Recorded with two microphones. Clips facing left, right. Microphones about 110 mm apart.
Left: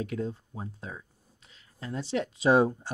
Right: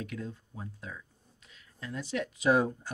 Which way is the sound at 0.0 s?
30° left (ahead or behind).